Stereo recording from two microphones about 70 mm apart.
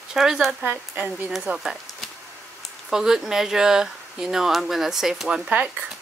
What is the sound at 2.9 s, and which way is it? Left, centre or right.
Speech, centre.